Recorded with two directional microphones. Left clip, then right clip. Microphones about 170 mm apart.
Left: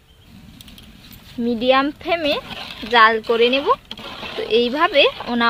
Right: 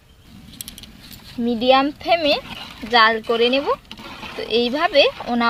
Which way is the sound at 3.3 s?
10° left (ahead or behind).